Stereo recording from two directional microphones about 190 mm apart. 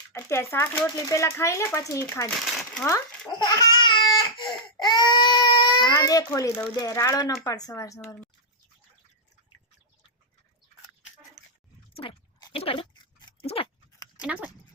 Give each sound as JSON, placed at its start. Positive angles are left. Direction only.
{"t": 0.1, "sound": "speech", "side_deg": 10}
{"t": 3.4, "sound": "baby cry", "side_deg": 20}
{"t": 6.7, "sound": "speech", "side_deg": 20}
{"t": 11.9, "sound": "a sound", "side_deg": 30}